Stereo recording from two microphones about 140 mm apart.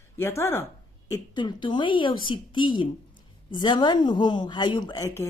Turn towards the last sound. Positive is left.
turn(degrees=30)  # may be behind; listen again after turning